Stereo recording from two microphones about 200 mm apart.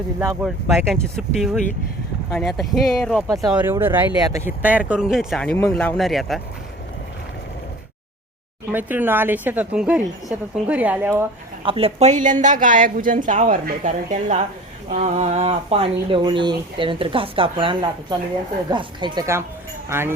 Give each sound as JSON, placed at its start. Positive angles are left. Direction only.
{"t": 0.4, "sound": "a woman's voice", "side_deg": 0}
{"t": 8.7, "sound": "a woman's voice", "side_deg": -10}
{"t": 11.6, "sound": "a woman's voice", "side_deg": -30}